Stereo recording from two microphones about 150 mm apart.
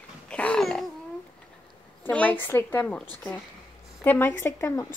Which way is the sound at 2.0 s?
10° left (ahead or behind).